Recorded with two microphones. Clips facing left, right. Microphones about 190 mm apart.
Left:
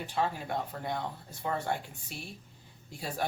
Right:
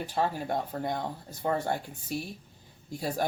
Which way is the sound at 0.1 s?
40° right (ahead or behind).